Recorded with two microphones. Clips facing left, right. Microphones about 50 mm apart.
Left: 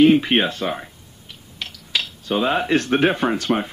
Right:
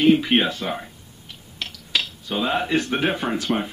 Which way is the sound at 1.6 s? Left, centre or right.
Centre.